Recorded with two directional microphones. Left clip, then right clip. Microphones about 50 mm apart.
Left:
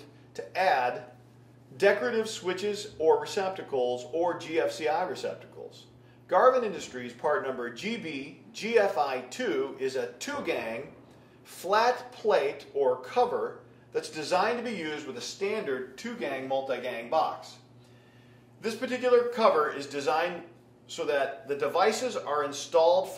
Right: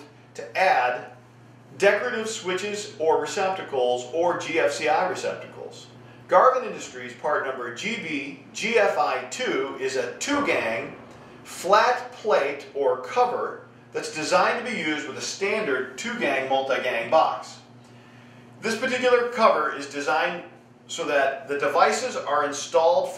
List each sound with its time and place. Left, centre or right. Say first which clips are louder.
0.5 s speech: right 5 dB; right
1.8 s speech: right 4 dB; right
18.6 s speech: right 7 dB; right